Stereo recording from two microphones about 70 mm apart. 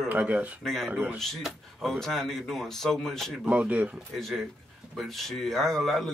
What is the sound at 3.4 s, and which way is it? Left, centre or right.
Speech, centre.